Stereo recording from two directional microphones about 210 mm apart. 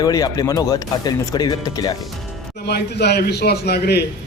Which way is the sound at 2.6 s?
50° left (ahead or behind).